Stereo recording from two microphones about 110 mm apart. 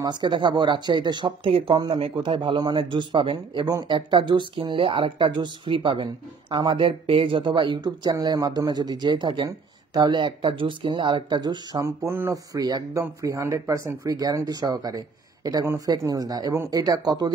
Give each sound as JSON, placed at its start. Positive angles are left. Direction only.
{"t": 0.0, "sound": "speech", "side_deg": -45}
{"t": 11.8, "sound": "speech", "side_deg": -25}